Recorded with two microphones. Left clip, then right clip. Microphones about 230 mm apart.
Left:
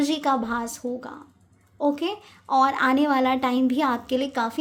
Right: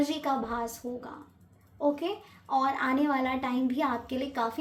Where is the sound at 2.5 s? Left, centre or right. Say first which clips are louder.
Left 7 dB; left.